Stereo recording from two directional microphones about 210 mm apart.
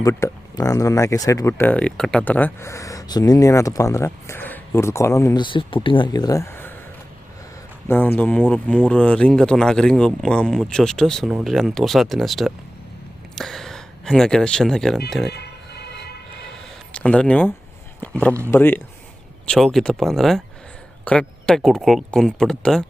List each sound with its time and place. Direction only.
0.0 s speech: 15° left (ahead or behind)
7.9 s speech: 10° left (ahead or behind)
15.3 s music: 50° left (ahead or behind)
16.9 s speech: 5° left (ahead or behind)